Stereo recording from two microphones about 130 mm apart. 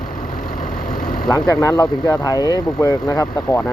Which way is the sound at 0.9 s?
90° left.